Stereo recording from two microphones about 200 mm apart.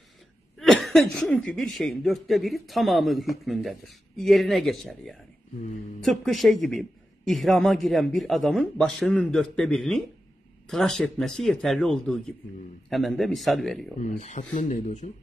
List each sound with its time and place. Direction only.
0.6 s speech: centre (ahead or behind)
13.9 s speech: 35° left (ahead or behind)